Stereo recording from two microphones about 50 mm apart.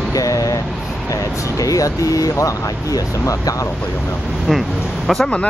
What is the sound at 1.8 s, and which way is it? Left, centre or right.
Speech, left.